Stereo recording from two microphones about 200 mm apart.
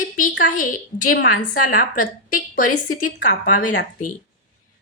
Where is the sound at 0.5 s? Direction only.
40° left (ahead or behind).